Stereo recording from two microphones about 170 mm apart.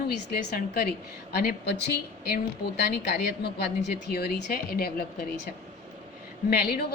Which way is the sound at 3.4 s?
70° left (ahead or behind).